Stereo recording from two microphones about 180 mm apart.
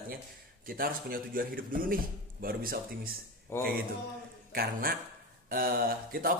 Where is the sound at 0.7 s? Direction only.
55° right (ahead or behind).